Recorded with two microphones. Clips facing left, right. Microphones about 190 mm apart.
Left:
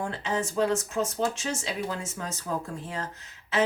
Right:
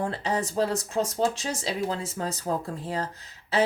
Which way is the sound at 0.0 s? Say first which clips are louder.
Right 2 dB; 35° right (ahead or behind).